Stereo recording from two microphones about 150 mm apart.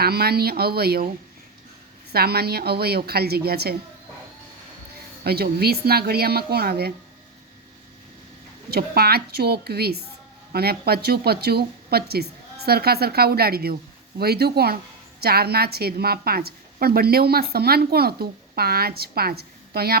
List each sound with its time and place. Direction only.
0.0 s a woman's voice: 90° right
2.1 s a woman's voice: 90° right
5.2 s a woman's voice: 90° right
8.7 s a woman's voice: 90° right